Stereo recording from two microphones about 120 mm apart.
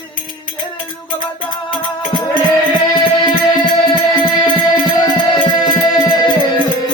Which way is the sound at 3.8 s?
45° left (ahead or behind).